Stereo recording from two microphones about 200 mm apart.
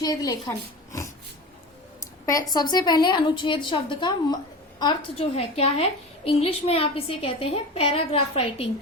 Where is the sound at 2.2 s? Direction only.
15° left (ahead or behind).